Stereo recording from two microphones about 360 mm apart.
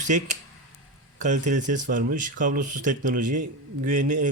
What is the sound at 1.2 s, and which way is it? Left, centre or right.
Speech, centre.